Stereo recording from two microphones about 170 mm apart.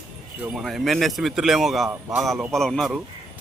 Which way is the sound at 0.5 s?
Centre (ahead or behind).